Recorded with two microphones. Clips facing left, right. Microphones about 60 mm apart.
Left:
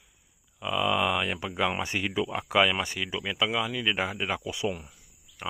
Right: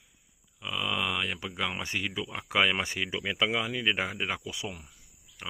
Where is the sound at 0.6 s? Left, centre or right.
Centre.